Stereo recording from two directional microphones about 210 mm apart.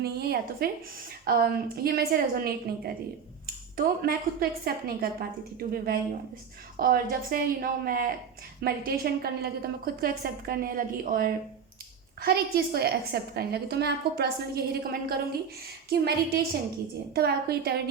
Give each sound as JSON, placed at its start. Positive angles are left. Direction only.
{"t": 0.0, "sound": "a woman's voice", "side_deg": -50}